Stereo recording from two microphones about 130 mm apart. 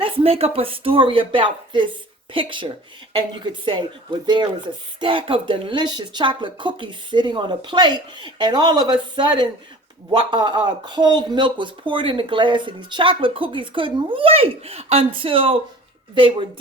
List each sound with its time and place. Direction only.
0.0 s speech: 50° right (ahead or behind)